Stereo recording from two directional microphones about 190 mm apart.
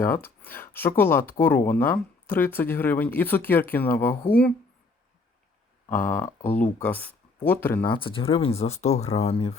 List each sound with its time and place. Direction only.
0.0 s speech: 10° left (ahead or behind)
5.9 s speech: 10° left (ahead or behind)
7.9 s speech: 25° left (ahead or behind)